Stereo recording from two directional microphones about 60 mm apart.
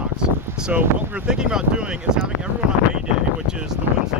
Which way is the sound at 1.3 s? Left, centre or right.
Centre.